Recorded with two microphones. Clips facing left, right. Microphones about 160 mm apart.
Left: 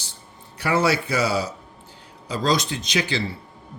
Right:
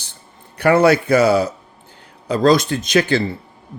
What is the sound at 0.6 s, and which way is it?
Speech, 55° right (ahead or behind).